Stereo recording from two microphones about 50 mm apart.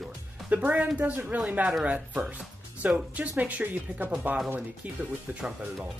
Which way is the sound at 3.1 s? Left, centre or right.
Right.